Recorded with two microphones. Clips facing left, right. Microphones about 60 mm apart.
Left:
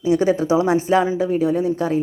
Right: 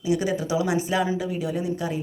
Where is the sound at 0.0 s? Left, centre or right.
Left.